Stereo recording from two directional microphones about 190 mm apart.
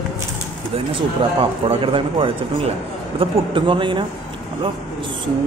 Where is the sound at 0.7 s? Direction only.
30° right (ahead or behind).